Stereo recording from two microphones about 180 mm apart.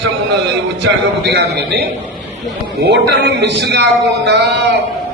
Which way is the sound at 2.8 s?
70° right (ahead or behind).